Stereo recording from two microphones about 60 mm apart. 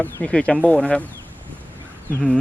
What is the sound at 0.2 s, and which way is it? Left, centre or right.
Speech, centre.